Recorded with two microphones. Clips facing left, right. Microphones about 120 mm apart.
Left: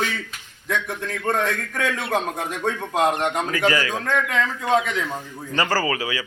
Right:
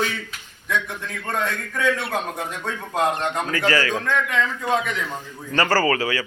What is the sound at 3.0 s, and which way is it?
Speech, 15° left (ahead or behind).